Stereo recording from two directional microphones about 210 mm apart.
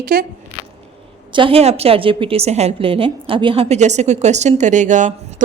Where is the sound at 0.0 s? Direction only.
45° right (ahead or behind).